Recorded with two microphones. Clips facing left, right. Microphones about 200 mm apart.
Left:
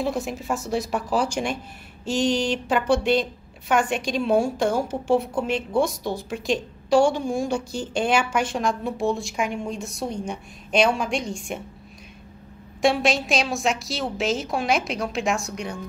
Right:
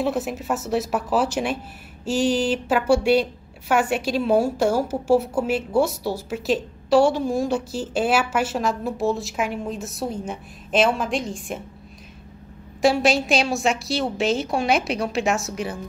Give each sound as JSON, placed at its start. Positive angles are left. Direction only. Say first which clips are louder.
{"t": 0.0, "sound": "a woman's voice", "louder": "right 2 dB", "side_deg": -5}
{"t": 12.8, "sound": "a woman's voice", "louder": "right 2 dB", "side_deg": 0}